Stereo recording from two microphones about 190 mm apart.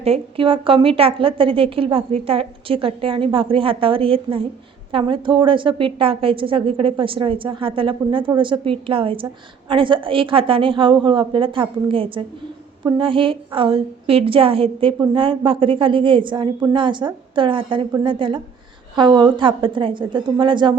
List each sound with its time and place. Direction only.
0.0 s a woman's voice: 30° right (ahead or behind)